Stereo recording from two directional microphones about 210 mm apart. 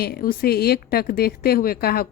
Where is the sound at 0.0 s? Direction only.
45° left (ahead or behind).